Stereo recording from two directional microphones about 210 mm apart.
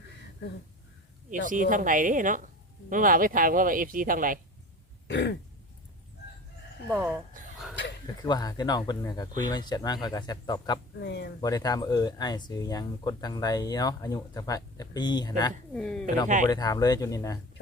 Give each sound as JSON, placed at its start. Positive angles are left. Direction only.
{"t": 1.3, "sound": "speech", "side_deg": -40}
{"t": 5.0, "sound": "throat clearing", "side_deg": 55}
{"t": 6.8, "sound": "speech", "side_deg": -5}
{"t": 8.2, "sound": "speech", "side_deg": 20}
{"t": 11.0, "sound": "speech", "side_deg": 55}
{"t": 11.3, "sound": "speech", "side_deg": 15}
{"t": 15.7, "sound": "speech", "side_deg": 5}
{"t": 16.5, "sound": "speech", "side_deg": 20}